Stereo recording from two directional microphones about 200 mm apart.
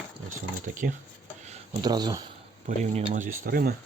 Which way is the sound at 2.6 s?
35° right (ahead or behind).